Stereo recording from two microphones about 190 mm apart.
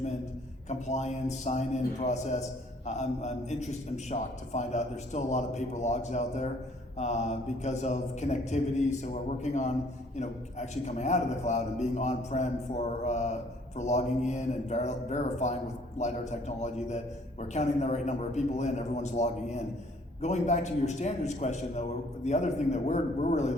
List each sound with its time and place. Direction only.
0.7 s a man's voice: 35° left (ahead or behind)